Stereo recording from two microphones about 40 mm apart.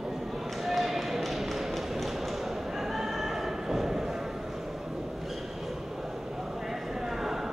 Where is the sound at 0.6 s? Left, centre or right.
Centre.